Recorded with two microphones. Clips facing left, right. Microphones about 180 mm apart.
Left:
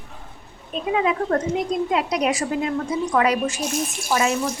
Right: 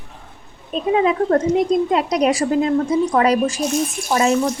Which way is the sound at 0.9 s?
35° right (ahead or behind).